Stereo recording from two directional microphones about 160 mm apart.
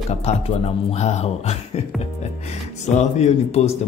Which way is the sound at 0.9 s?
45° left (ahead or behind).